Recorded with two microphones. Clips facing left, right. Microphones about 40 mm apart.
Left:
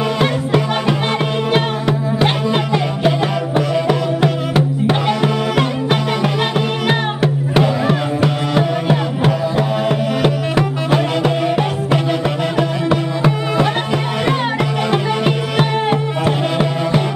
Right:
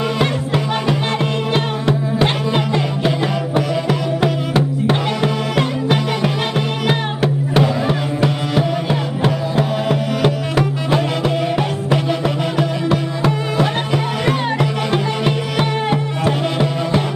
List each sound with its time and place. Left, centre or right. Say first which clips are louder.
0.2 s music: left 2 dB; centre
14.2 s music: left 1 dB; centre